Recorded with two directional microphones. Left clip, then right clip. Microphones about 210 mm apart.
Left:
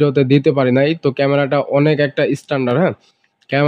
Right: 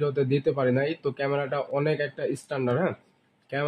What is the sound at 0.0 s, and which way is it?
A man's voice, 45° left (ahead or behind).